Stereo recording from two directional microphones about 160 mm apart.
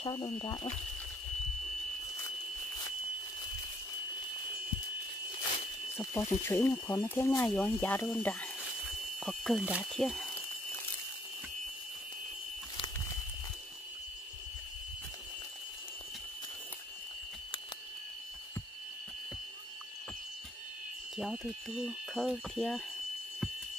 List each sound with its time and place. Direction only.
0.0 s speech: 30° left (ahead or behind)
5.9 s speech: 15° left (ahead or behind)
9.2 s speech: centre (ahead or behind)
21.2 s speech: centre (ahead or behind)